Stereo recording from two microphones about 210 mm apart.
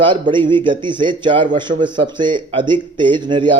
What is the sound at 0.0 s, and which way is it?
A man's voice, 25° right (ahead or behind).